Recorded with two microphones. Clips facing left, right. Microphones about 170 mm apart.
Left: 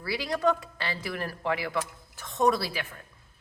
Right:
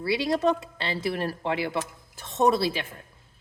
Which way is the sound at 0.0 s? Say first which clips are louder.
Right 3 dB; 25° right (ahead or behind).